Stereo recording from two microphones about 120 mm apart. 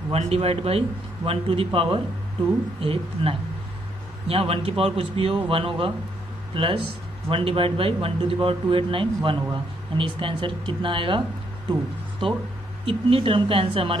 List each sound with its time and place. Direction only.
0.1 s a man's voice: 55° right (ahead or behind)
12.8 s speech: 50° right (ahead or behind)